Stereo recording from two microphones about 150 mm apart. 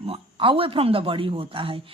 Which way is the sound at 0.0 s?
35° right (ahead or behind).